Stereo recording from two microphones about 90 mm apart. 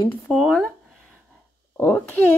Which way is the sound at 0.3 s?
Centre (ahead or behind).